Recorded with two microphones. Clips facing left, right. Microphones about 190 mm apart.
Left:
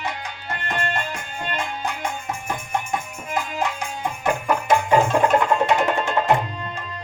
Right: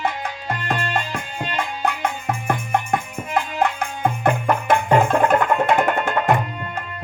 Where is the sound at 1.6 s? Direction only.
60° right (ahead or behind).